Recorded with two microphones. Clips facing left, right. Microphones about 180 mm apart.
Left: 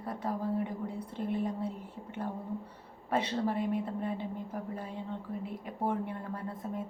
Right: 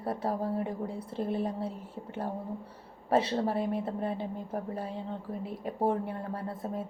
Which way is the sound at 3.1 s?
30° right (ahead or behind).